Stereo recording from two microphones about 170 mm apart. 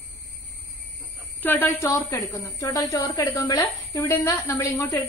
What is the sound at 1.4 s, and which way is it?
A woman's voice, 10° left (ahead or behind).